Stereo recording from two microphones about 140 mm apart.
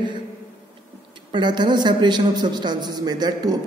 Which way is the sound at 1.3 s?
35° right (ahead or behind).